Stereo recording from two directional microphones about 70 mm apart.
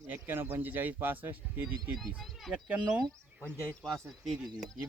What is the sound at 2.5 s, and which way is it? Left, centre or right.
Speech, centre.